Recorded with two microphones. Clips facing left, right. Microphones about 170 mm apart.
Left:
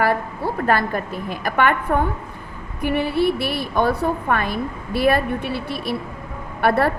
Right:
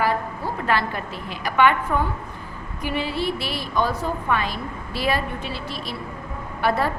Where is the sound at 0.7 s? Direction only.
50° left (ahead or behind).